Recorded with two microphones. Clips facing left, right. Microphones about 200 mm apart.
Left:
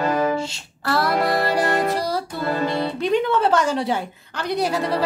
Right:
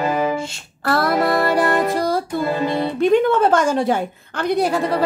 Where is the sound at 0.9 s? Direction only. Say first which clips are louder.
Right 3 dB; 50° right (ahead or behind).